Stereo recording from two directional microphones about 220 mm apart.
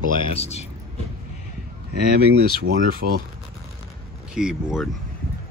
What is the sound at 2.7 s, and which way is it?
Speech, 65° right (ahead or behind).